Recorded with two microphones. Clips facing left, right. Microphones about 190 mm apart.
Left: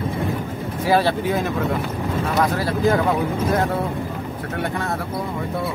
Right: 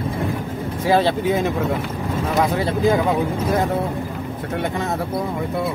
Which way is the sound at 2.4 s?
15° right (ahead or behind).